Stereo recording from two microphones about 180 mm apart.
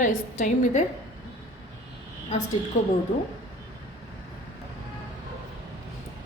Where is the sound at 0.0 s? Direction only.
45° left (ahead or behind).